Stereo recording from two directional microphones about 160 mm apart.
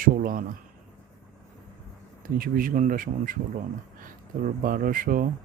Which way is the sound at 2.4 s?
60° right (ahead or behind).